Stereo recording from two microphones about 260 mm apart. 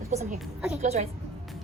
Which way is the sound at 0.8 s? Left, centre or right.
Right.